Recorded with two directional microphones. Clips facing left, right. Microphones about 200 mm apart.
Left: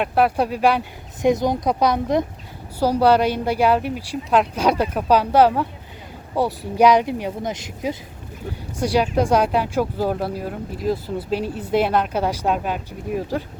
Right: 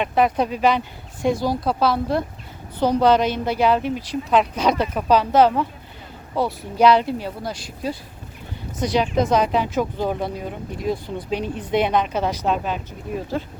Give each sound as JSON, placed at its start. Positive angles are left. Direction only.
{"t": 0.0, "sound": "speech", "side_deg": 5}
{"t": 1.2, "sound": "speech", "side_deg": 20}